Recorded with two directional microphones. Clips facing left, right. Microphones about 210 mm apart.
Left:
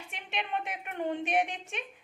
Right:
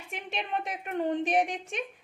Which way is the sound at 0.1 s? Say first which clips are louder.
Right 2 dB; 40° right (ahead or behind).